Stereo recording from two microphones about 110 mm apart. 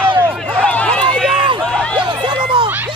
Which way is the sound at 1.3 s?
50° right (ahead or behind).